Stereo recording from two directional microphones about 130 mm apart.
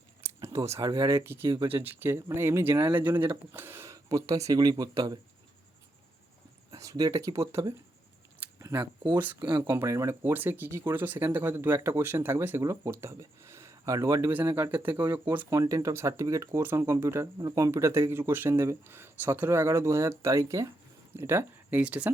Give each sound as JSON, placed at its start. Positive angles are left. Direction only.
{"t": 0.2, "sound": "a sound", "side_deg": -25}
{"t": 0.9, "sound": "speech", "side_deg": -30}
{"t": 1.5, "sound": "speech", "side_deg": -35}
{"t": 1.7, "sound": "speech", "side_deg": -15}
{"t": 6.7, "sound": "speech", "side_deg": -25}
{"t": 9.1, "sound": "speech", "side_deg": -15}
{"t": 9.4, "sound": "speech", "side_deg": -35}
{"t": 9.6, "sound": "speech", "side_deg": -20}
{"t": 15.4, "sound": "speech", "side_deg": -25}